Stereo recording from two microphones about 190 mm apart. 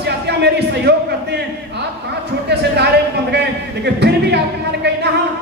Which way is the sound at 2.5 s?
60° right (ahead or behind).